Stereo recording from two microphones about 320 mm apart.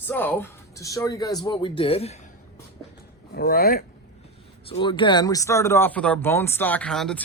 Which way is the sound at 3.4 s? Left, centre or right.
Left.